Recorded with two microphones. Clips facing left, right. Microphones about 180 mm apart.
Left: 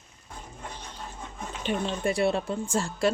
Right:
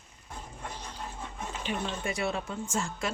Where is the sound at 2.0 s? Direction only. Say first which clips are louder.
Left 7 dB; 30° left (ahead or behind).